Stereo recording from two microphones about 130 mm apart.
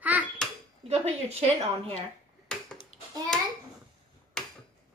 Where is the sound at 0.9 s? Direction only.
55° right (ahead or behind).